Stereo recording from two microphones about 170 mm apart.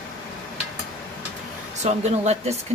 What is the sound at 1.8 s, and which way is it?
Speech, 40° right (ahead or behind).